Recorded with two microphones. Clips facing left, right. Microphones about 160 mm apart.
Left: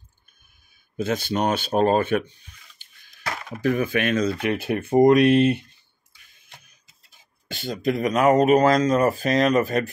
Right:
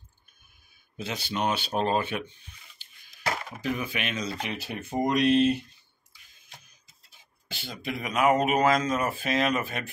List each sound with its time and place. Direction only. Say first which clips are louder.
0.9 s speech: left 8 dB; 45° left (ahead or behind)
3.6 s speech: left 10 dB; 50° left (ahead or behind)
7.4 s speech: left 11 dB; 45° left (ahead or behind)